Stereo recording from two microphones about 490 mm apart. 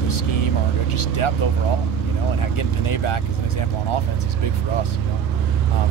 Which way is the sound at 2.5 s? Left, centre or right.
Left.